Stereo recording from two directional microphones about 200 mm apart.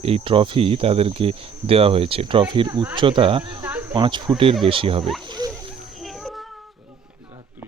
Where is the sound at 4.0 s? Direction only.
25° right (ahead or behind).